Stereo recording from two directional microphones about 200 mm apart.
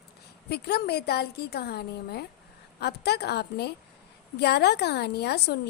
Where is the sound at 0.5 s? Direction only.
55° left (ahead or behind).